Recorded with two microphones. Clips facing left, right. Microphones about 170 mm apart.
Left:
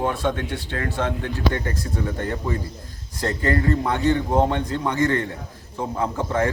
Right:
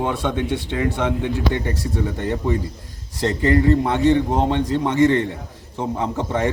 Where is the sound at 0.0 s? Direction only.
20° right (ahead or behind).